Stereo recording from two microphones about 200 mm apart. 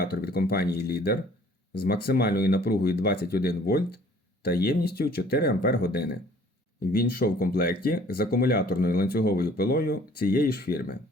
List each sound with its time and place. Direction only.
0.0 s speech: 50° left (ahead or behind)